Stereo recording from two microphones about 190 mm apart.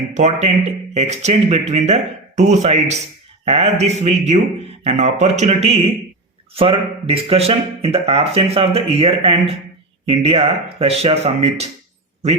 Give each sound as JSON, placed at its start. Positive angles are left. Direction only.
{"t": 0.1, "sound": "speech", "side_deg": -35}